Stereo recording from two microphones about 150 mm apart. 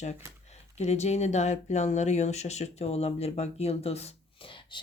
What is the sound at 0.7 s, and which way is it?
Speech, 50° left (ahead or behind).